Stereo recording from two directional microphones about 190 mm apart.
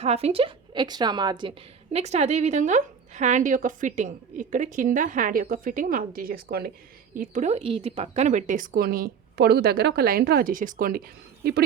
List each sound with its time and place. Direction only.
0.0 s a woman's voice: 30° right (ahead or behind); by 6.7 s 55° right (ahead or behind)
7.2 s speech: 40° right (ahead or behind)